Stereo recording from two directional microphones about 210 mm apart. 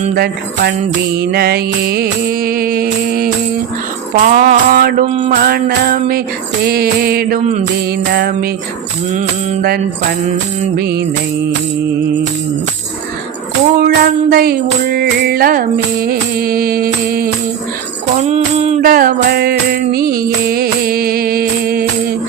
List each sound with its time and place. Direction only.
0.0 s music: 45° right (ahead or behind)
13.7 s music: 45° right (ahead or behind)
18.2 s music: 30° right (ahead or behind)